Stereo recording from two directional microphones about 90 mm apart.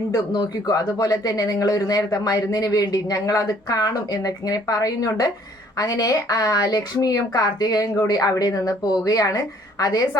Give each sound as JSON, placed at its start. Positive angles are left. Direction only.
{"t": 0.1, "sound": "speech", "side_deg": 45}